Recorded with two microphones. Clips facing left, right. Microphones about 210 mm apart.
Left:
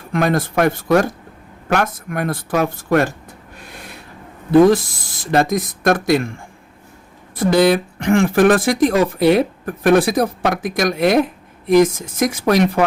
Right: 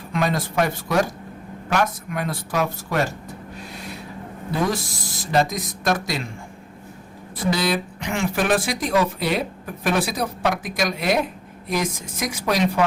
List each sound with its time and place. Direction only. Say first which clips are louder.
0.1 s speech: left 6 dB; 50° left (ahead or behind)
4.5 s speech: left 13 dB; 55° left (ahead or behind)
7.3 s speech: left 9 dB; 55° left (ahead or behind)